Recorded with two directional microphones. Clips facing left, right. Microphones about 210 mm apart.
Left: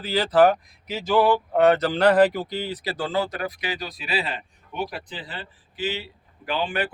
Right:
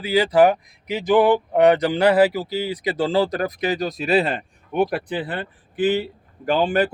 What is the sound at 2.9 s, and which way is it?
Speech, 30° right (ahead or behind).